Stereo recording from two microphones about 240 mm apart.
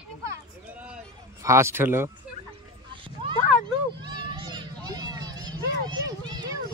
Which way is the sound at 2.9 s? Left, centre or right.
Right.